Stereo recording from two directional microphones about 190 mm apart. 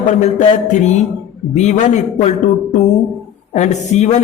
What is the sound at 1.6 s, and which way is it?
A man's voice, 40° left (ahead or behind).